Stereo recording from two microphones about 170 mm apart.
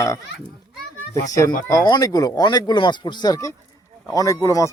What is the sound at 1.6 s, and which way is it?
Speech, 20° left (ahead or behind).